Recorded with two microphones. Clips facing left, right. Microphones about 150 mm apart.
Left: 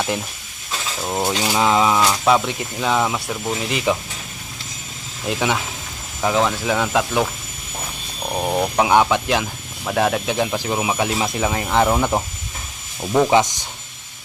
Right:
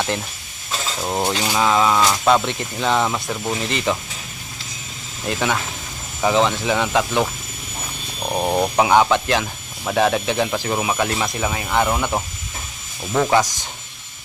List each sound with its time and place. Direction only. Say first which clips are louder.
1.0 s speech: even; 10° right (ahead or behind)
1.4 s speech: left 1 dB; 15° left (ahead or behind)
5.2 s speech: left 1 dB; 5° left (ahead or behind)
8.3 s speech: right 1 dB; 10° right (ahead or behind); by 11.3 s 10° left (ahead or behind)
11.3 s speech: left 3 dB; 25° left (ahead or behind)
13.0 s speech: left 2 dB; 15° left (ahead or behind)